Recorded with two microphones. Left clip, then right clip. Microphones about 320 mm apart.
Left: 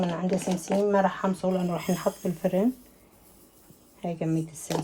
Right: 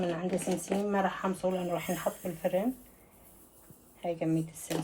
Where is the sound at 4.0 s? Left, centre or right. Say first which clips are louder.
Left 1 dB; left.